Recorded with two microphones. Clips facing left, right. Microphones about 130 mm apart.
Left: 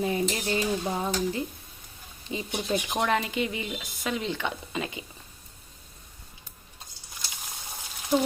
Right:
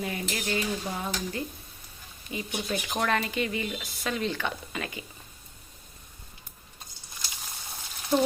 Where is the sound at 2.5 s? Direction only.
20° left (ahead or behind).